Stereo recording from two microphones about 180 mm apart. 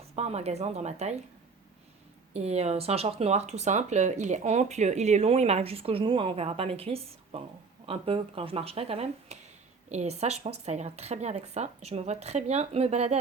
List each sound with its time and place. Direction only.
0.2 s speech: 35° right (ahead or behind)
2.3 s speech: 35° right (ahead or behind)